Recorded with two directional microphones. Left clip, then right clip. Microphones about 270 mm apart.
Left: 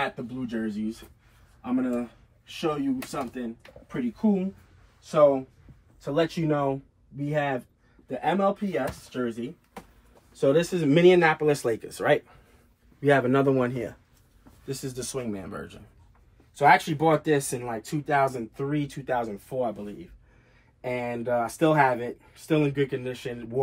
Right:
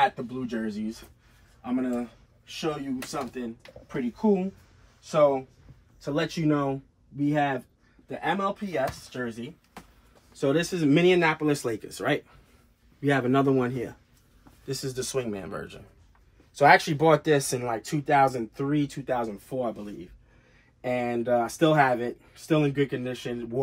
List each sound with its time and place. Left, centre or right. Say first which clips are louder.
0.0 s speech: right 6 dB; centre
14.8 s speech: right 5 dB; centre
16.5 s speech: right 1 dB; right
18.1 s speech: right 2 dB; centre